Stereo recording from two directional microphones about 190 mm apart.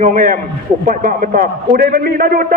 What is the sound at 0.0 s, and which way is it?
A man's voice, 45° right (ahead or behind).